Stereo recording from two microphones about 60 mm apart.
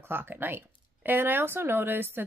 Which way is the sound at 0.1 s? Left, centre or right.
Right.